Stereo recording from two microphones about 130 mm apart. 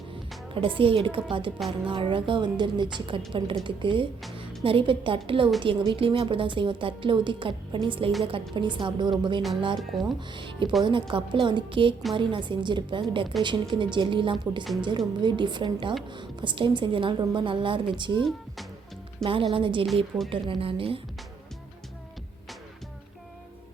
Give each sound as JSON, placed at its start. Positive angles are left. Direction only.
{"t": 0.5, "sound": "a woman's voice", "side_deg": -40}
{"t": 9.9, "sound": "speech", "side_deg": 0}
{"t": 10.3, "sound": "a woman's voice", "side_deg": -40}